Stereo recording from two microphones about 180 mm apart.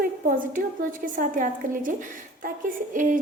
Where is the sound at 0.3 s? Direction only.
50° right (ahead or behind).